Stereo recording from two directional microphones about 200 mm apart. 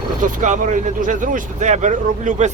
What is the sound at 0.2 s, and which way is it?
Speech, 40° right (ahead or behind).